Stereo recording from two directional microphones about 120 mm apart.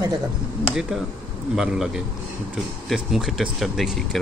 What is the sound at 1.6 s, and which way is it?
Speech, 5° right (ahead or behind).